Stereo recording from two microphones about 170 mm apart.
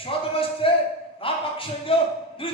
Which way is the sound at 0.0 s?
30° left (ahead or behind).